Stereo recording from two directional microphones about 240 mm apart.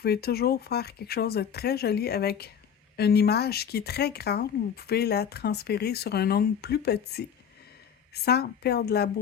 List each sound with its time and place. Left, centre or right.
0.0 s speech: left